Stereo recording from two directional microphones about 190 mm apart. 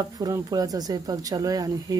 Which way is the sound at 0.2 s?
20° right (ahead or behind).